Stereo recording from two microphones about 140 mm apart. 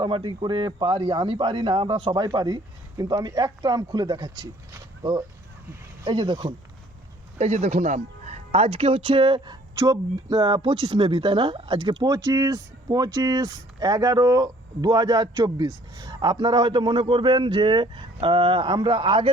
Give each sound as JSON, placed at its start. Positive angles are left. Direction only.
{"t": 0.0, "sound": "speech", "side_deg": -30}
{"t": 6.1, "sound": "speech", "side_deg": -30}
{"t": 7.3, "sound": "speech", "side_deg": -50}